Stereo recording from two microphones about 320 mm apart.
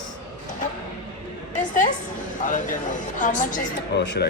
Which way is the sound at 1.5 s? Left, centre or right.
Left.